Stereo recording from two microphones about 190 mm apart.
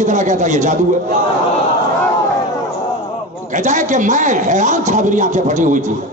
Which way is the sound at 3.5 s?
40° right (ahead or behind).